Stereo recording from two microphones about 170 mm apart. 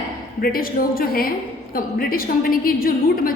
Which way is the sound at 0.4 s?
60° left (ahead or behind).